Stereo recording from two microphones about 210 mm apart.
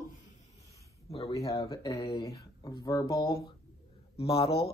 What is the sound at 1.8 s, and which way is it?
Speech, 15° left (ahead or behind).